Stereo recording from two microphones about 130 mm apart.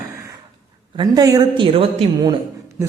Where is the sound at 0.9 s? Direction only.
30° right (ahead or behind).